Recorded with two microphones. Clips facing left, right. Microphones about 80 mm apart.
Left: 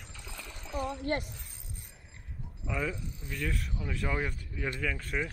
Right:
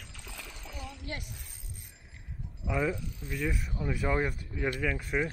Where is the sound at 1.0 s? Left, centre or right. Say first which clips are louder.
Left 8 dB; left.